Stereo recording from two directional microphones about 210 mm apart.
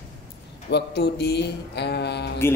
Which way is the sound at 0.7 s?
50° left (ahead or behind).